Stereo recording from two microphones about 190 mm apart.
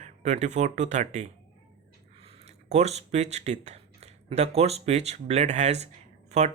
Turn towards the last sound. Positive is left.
turn(degrees=-35)  # may be behind; listen again after turning